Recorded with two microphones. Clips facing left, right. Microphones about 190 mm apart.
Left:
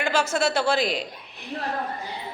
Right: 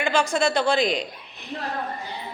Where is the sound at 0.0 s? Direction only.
5° left (ahead or behind).